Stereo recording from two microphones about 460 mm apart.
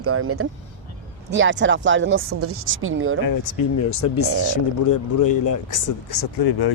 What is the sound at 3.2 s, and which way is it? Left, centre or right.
Speech, left.